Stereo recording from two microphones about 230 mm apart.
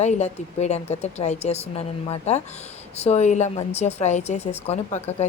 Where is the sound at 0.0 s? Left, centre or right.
Left.